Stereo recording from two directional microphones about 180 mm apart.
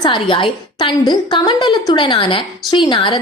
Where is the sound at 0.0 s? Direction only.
25° left (ahead or behind).